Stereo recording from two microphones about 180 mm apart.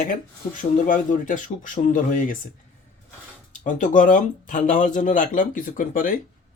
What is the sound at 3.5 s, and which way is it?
Speech, 45° left (ahead or behind).